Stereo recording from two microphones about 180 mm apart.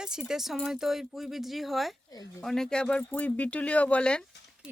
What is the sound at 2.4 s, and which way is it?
Speech, 5° left (ahead or behind).